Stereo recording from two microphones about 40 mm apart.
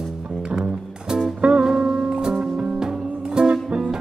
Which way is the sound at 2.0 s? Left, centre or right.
Right.